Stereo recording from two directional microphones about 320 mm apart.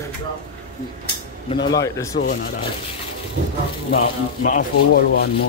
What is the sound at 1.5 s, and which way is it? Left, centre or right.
Speech, centre.